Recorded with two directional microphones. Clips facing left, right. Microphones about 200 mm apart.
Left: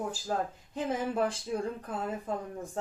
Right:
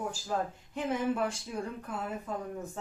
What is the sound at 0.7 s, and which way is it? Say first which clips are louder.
A woman's voice: right 1 dB; 35° left (ahead or behind).